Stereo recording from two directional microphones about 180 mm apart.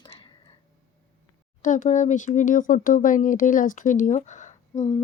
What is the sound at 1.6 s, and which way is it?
Speech, 45° left (ahead or behind).